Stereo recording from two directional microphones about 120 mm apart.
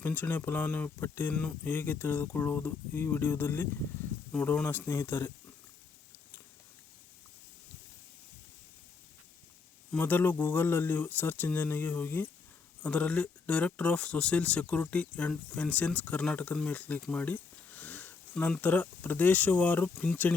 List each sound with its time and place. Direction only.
0.0 s speech: 15° left (ahead or behind)
9.9 s speech: 15° left (ahead or behind)